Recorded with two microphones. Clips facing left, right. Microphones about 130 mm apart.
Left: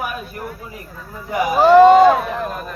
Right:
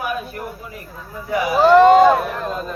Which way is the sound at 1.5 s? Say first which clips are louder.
Left 2 dB; centre (ahead or behind).